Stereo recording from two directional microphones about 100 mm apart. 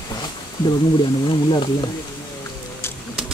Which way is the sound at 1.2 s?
55° left (ahead or behind).